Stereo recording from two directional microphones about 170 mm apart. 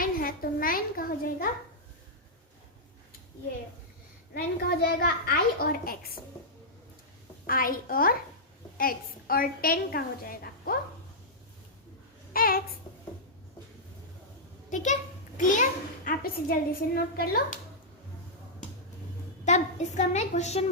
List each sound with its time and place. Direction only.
0.0 s a woman's voice: 55° left (ahead or behind)
4.4 s a woman's voice: 60° left (ahead or behind)
7.4 s a woman's voice: 55° left (ahead or behind)
12.3 s a woman's voice: 60° left (ahead or behind)
14.7 s a child's voice: 45° left (ahead or behind); by 17.6 s 60° left (ahead or behind)
19.5 s a woman's voice: 40° left (ahead or behind)